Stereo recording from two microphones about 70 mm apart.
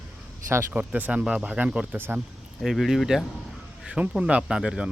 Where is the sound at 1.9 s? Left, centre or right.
Right.